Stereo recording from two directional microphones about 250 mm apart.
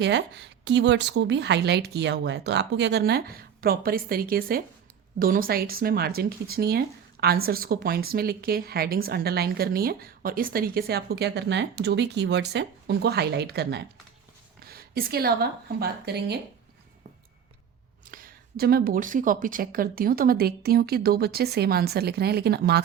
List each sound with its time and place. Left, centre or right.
0.0 s a woman's voice: right
18.0 s speech: right